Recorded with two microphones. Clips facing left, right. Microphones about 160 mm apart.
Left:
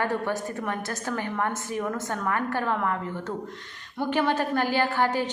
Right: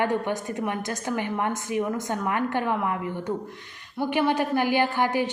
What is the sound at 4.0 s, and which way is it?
A woman's voice, 10° right (ahead or behind).